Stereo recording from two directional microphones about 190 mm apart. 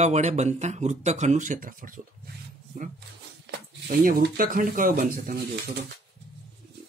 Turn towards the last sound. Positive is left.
turn(degrees=-55)  # may be behind; listen again after turning